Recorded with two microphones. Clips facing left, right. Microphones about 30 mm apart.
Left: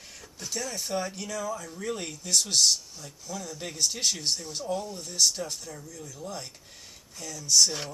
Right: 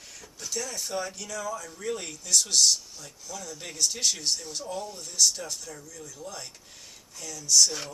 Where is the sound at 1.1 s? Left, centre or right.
Left.